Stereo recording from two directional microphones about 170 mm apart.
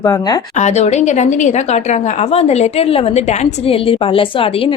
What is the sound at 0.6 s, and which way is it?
A woman's voice, 40° left (ahead or behind).